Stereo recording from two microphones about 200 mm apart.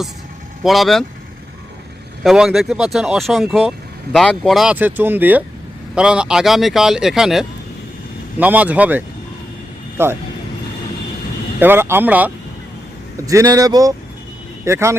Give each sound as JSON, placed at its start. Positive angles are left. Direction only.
{"t": 0.6, "sound": "speech", "side_deg": 0}
{"t": 2.2, "sound": "speech", "side_deg": 0}
{"t": 11.6, "sound": "speech", "side_deg": -10}